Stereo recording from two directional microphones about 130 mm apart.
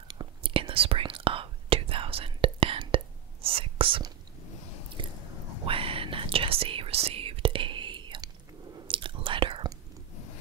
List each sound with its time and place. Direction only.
0.1 s whispering: 40° right (ahead or behind)
5.0 s biting: 40° right (ahead or behind)
5.7 s whispering: 45° right (ahead or behind)